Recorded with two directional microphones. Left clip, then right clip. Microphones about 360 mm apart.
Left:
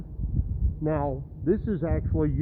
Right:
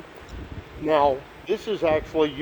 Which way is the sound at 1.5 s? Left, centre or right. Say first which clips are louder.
Right 8 dB; centre.